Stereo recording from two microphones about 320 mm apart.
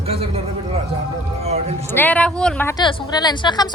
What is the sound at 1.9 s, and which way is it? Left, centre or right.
Speech, centre.